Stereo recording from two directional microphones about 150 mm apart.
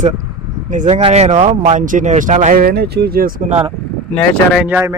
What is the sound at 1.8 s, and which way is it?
Speech, 60° right (ahead or behind).